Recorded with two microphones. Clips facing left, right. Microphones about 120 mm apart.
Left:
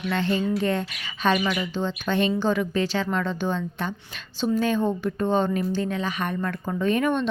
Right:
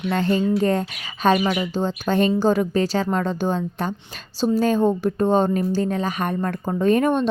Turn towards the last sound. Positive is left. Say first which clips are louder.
# right 5 dB
turn(degrees=-40)  # may be behind; listen again after turning